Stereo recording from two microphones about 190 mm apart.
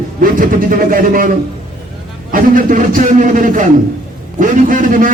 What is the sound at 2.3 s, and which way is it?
Speech, 45° right (ahead or behind).